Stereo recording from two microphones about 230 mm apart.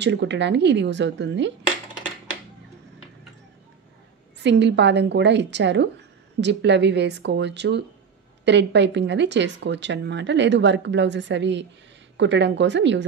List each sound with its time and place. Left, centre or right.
0.0 s speech: right
4.4 s speech: right